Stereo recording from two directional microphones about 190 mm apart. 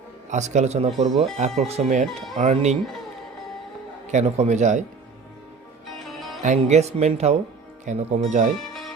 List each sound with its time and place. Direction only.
0.3 s speech: 40° right (ahead or behind)
4.1 s speech: 35° right (ahead or behind)
6.0 s music: centre (ahead or behind)
6.4 s speech: 40° right (ahead or behind)
8.5 s music: centre (ahead or behind)